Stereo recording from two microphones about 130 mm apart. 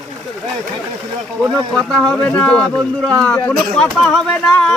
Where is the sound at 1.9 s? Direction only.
5° left (ahead or behind).